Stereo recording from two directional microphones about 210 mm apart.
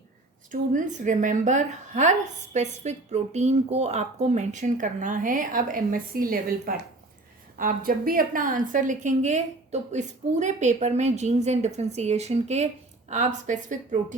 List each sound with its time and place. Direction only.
0.5 s a woman's voice: 40° right (ahead or behind)